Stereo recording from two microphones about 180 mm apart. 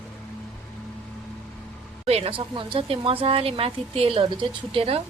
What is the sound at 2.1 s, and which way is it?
A woman's voice, 30° right (ahead or behind).